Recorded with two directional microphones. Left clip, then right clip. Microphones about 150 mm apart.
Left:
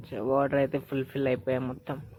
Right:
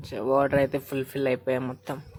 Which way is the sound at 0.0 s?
20° right (ahead or behind).